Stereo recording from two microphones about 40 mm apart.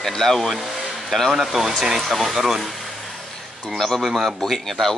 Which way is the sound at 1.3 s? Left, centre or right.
Centre.